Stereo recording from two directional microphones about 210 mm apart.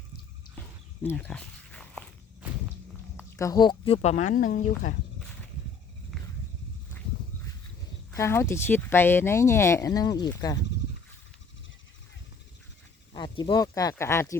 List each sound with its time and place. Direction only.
1.0 s walk: 5° left (ahead or behind)
3.2 s speech: 15° left (ahead or behind); by 4.9 s 40° left (ahead or behind)
8.1 s speech: 10° left (ahead or behind)
13.1 s speech: 20° left (ahead or behind)